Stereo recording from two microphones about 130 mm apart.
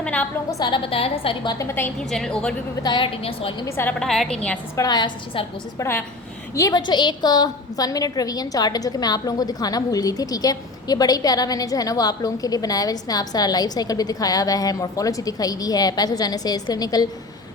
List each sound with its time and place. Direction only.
0.0 s a sound: 10° left (ahead or behind)
0.6 s a woman's voice: 40° left (ahead or behind)
1.5 s a woman's voice: 20° left (ahead or behind)
2.0 s a woman's voice: 5° left (ahead or behind)
2.8 s a woman's voice: 40° left (ahead or behind)
3.7 s a woman's voice: 20° left (ahead or behind)
4.0 s a woman's voice: 5° left (ahead or behind)
4.8 s a woman's voice: 30° left (ahead or behind)
6.5 s a woman's voice: 25° left (ahead or behind)